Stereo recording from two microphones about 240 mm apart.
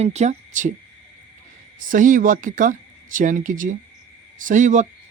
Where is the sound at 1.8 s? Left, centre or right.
Right.